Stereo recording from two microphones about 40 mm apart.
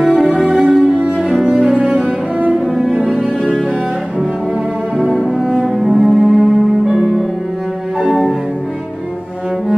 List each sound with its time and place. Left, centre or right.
0.0 s music: centre
1.1 s cello: right
2.5 s cello: centre
3.0 s music: centre
5.1 s cello: centre
5.8 s cello: centre
6.9 s music: centre
8.1 s cello: centre